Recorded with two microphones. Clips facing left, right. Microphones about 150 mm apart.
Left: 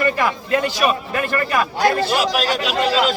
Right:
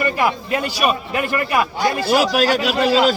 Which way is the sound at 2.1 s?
45° right (ahead or behind).